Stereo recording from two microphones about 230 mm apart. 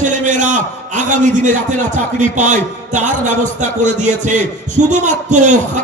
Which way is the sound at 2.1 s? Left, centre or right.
Right.